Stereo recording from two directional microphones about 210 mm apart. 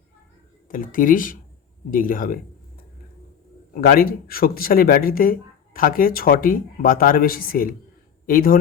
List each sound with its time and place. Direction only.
0.7 s speech: 40° left (ahead or behind)
3.8 s speech: 45° left (ahead or behind)